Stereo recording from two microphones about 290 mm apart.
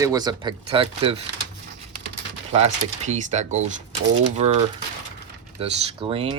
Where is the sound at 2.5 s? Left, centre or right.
Right.